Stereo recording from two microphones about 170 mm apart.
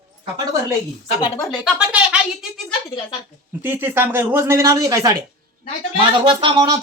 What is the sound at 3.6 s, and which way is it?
Speech, 10° right (ahead or behind).